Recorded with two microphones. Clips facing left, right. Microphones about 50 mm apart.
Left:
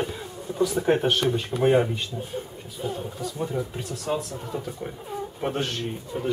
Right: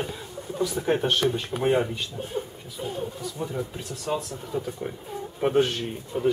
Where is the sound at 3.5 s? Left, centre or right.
Centre.